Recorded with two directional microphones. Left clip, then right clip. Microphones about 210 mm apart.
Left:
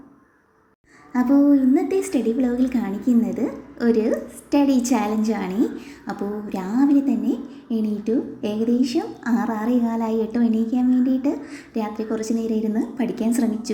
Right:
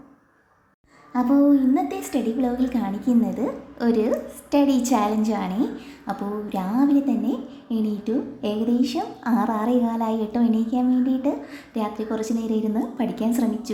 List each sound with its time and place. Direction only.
1.1 s a woman's voice: centre (ahead or behind)